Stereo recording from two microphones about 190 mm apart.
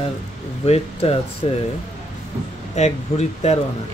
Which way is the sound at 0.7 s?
30° left (ahead or behind).